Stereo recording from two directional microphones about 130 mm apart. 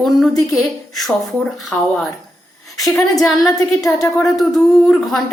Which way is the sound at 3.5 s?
25° left (ahead or behind).